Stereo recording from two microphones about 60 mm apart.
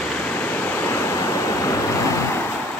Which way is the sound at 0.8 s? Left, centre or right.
Left.